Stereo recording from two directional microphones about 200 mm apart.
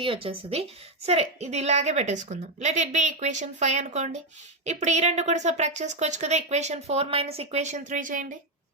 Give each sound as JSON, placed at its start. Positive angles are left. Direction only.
{"t": 0.0, "sound": "a woman's voice", "side_deg": -25}